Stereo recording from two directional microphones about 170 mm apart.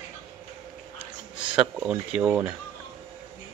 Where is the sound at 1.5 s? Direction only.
5° right (ahead or behind).